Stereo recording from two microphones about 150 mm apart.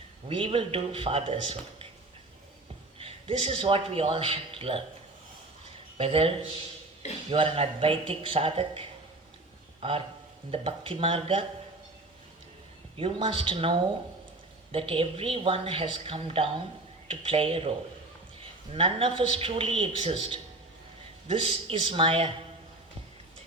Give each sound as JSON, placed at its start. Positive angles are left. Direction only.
{"t": 0.3, "sound": "a woman's voice", "side_deg": -40}
{"t": 3.0, "sound": "a man's voice", "side_deg": -35}
{"t": 6.0, "sound": "a woman's voice", "side_deg": -40}
{"t": 10.5, "sound": "a woman's voice", "side_deg": -35}
{"t": 13.0, "sound": "a woman's voice", "side_deg": -35}